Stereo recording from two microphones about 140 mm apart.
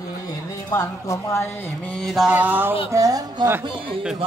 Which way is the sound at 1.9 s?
5° left (ahead or behind).